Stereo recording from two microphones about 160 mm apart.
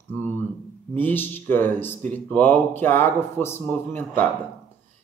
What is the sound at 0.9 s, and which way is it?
Speech, 10° left (ahead or behind).